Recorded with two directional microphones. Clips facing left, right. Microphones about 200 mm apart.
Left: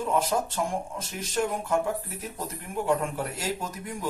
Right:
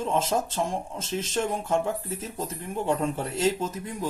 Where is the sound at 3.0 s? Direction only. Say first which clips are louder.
Right 6 dB; 25° right (ahead or behind).